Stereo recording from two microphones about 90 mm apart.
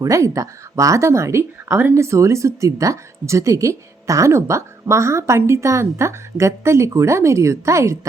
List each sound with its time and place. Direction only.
0.0 s speech: 35° right (ahead or behind)